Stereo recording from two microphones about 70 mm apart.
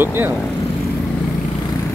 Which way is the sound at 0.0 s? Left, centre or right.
Right.